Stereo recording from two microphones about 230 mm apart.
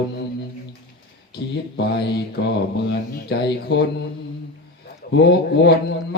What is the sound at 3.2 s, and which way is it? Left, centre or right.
Speech, left.